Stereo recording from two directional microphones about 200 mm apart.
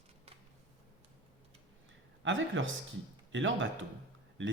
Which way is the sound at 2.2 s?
70° right (ahead or behind).